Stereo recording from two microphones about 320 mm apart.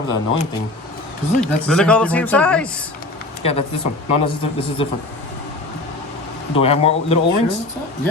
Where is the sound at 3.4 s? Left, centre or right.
Centre.